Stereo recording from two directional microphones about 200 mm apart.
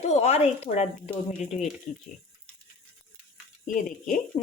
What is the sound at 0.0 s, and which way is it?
A woman's voice, 35° left (ahead or behind).